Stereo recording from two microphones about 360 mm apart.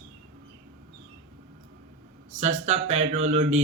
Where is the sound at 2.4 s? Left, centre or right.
Centre.